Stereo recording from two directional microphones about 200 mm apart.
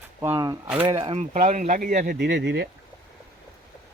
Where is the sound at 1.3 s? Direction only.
40° right (ahead or behind); by 2.6 s 60° right (ahead or behind).